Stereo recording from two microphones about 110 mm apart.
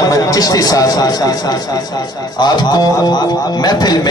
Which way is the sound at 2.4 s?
40° left (ahead or behind).